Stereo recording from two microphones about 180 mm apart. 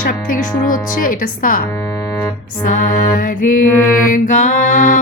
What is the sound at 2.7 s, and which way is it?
Mantra, 50° left (ahead or behind).